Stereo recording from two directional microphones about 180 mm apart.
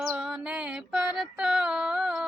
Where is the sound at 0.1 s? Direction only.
5° right (ahead or behind).